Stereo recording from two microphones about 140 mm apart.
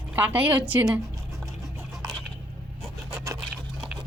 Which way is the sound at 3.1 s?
25° right (ahead or behind).